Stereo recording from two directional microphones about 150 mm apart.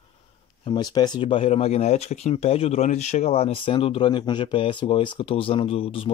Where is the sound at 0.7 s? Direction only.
30° left (ahead or behind).